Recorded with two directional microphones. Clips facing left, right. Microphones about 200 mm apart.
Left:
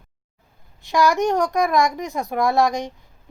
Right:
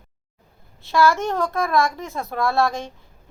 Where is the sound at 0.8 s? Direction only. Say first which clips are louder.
Even; 15° left (ahead or behind).